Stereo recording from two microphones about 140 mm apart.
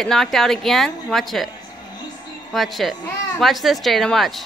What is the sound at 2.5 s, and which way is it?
Speech, centre (ahead or behind).